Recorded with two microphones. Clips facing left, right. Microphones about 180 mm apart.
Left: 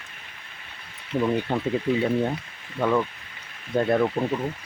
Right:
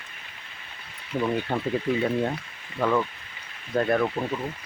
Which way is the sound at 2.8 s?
5° left (ahead or behind).